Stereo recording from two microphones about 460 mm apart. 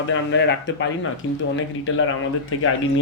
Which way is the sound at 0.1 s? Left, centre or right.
Left.